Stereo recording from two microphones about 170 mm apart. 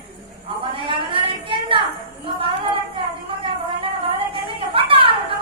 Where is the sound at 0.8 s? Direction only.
30° right (ahead or behind).